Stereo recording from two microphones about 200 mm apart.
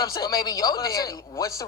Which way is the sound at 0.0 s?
20° left (ahead or behind).